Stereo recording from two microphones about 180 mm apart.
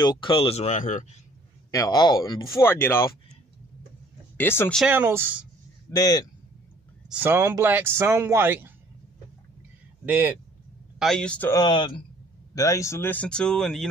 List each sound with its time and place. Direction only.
0.0 s speech: 25° left (ahead or behind); by 1.0 s 45° left (ahead or behind)
1.7 s speech: 20° left (ahead or behind)
4.4 s speech: 10° left (ahead or behind)
4.7 s speech: 10° right (ahead or behind)
5.9 s speech: 20° left (ahead or behind)
7.1 s speech: 10° right (ahead or behind)
10.0 s speech: 10° right (ahead or behind)
11.0 s speech: 5° left (ahead or behind)
11.5 s speech: 25° left (ahead or behind); by 13.8 s 5° left (ahead or behind)